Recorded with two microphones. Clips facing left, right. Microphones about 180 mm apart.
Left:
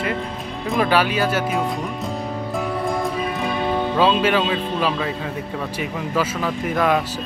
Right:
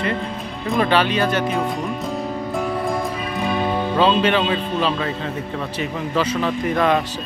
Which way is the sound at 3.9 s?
5° left (ahead or behind).